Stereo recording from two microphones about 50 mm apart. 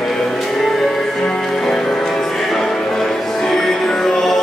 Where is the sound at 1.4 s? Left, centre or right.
Centre.